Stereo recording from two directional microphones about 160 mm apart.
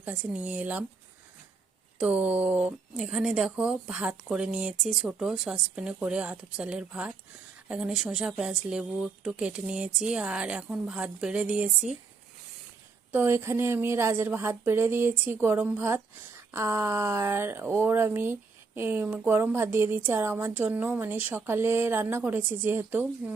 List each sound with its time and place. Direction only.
0.0 s speech: 10° right (ahead or behind)
2.0 s speech: 10° right (ahead or behind)
13.1 s speech: 15° right (ahead or behind)